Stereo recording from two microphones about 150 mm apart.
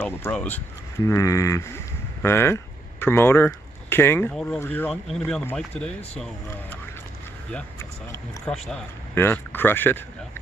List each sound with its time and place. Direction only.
0.0 s speech: 10° left (ahead or behind)
1.0 s speech: 20° left (ahead or behind)
8.5 s speech: 5° left (ahead or behind)
9.1 s speech: 15° left (ahead or behind)